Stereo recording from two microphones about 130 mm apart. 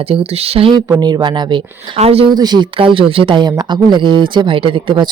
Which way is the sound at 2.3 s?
30° right (ahead or behind).